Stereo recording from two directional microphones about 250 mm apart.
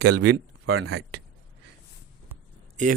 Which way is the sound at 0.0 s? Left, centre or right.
Right.